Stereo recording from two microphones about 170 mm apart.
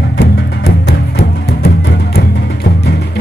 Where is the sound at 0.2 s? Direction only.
70° left (ahead or behind).